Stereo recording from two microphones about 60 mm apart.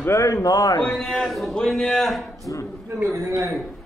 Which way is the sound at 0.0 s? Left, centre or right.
Left.